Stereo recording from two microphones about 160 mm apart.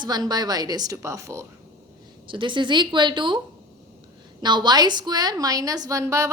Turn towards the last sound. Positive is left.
turn(degrees=-20)  # may be behind; listen again after turning